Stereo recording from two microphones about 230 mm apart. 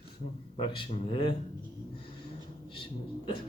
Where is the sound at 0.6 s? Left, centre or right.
Left.